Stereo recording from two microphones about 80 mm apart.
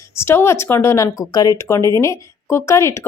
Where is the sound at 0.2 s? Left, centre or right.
Left.